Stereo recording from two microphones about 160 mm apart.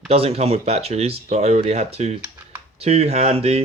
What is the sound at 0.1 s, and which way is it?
Speech, 40° right (ahead or behind).